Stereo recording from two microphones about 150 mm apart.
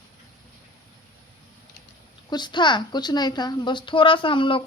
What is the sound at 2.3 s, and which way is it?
A woman's voice, 30° left (ahead or behind).